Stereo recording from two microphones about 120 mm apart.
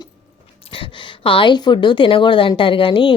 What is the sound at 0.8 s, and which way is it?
A woman's voice, 45° left (ahead or behind).